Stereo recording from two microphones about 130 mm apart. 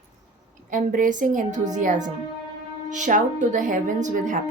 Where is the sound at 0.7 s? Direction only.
90° right; by 4.4 s 70° right (ahead or behind).